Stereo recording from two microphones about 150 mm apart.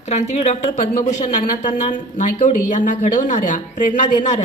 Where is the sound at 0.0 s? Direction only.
50° left (ahead or behind).